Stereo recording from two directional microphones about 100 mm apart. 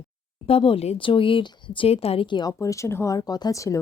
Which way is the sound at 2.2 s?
50° left (ahead or behind).